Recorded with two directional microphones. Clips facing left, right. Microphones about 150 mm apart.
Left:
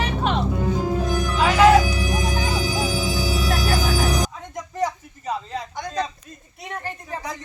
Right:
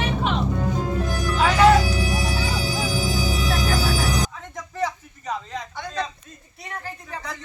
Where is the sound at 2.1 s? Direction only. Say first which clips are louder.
Left 2 dB; 45° left (ahead or behind).